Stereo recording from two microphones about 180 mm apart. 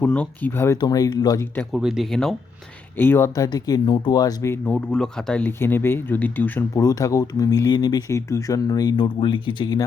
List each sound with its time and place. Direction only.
0.0 s speech: 10° left (ahead or behind)
1.7 s speech: centre (ahead or behind)
3.0 s speech: 15° left (ahead or behind)